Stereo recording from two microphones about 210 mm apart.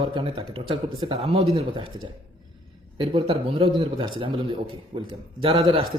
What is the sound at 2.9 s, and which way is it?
A man's voice, 25° right (ahead or behind).